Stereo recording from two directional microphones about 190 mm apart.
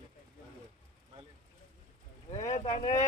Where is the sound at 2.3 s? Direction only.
35° left (ahead or behind).